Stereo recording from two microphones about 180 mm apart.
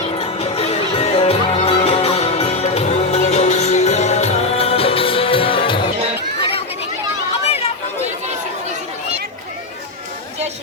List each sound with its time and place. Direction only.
0.2 s music: 35° left (ahead or behind)